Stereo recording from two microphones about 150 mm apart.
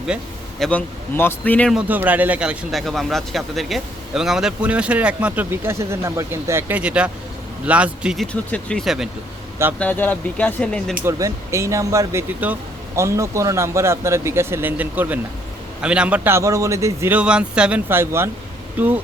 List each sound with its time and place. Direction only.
0.6 s speech: 10° left (ahead or behind)
1.7 s speech: 10° right (ahead or behind)
9.7 s speech: 10° left (ahead or behind)
11.0 s speech: 20° right (ahead or behind)